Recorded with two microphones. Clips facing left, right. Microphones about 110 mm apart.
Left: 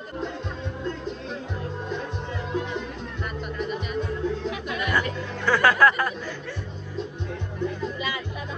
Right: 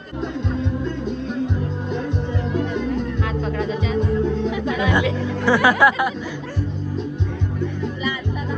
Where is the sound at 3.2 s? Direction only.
90° right.